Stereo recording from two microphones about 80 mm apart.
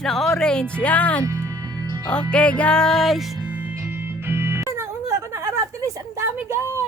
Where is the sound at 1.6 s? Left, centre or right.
Right.